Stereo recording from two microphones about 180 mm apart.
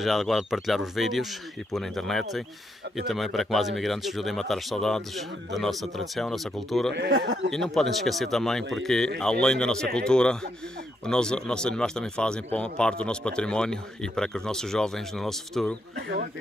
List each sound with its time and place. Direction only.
0.0 s speech: centre (ahead or behind)
6.9 s speech: 70° right (ahead or behind)
7.5 s speech: centre (ahead or behind)